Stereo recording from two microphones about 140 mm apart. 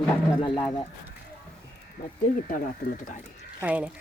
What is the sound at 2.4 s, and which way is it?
Speech, 75° left (ahead or behind).